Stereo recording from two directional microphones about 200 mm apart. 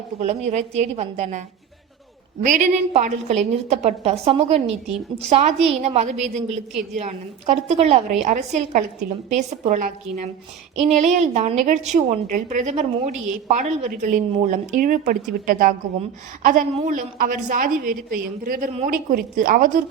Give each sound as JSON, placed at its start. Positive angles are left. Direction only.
{"t": 0.2, "sound": "a woman's voice", "side_deg": -35}